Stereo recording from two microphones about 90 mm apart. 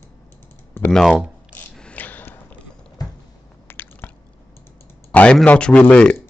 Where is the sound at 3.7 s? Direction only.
25° left (ahead or behind).